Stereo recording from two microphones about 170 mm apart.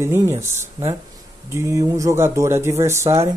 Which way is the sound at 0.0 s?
15° right (ahead or behind).